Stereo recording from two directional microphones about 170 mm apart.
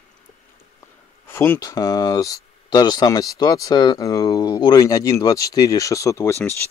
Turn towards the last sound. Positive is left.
turn(degrees=15)  # may be behind; listen again after turning